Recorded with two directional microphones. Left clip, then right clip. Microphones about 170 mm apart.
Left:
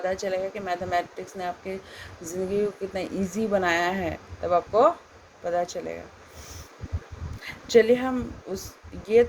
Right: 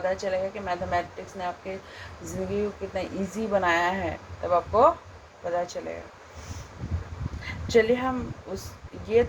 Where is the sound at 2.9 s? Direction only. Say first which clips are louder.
Left 1 dB; 45° left (ahead or behind).